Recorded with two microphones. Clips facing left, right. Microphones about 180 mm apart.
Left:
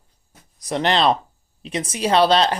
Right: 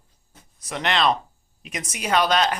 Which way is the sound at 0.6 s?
35° left (ahead or behind).